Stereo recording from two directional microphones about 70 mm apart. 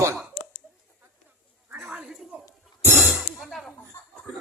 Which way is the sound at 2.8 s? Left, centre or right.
Right.